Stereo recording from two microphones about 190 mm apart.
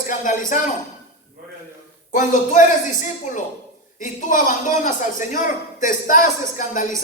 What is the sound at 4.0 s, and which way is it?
A man's voice, 45° left (ahead or behind).